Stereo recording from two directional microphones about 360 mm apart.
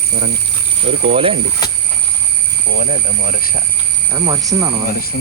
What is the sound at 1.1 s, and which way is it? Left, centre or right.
Speech, centre.